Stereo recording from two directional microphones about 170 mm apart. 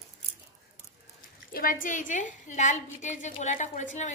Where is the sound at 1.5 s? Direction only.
55° left (ahead or behind).